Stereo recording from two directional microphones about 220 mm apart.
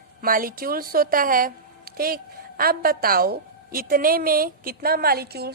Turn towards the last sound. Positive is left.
turn(degrees=-45)  # may be behind; listen again after turning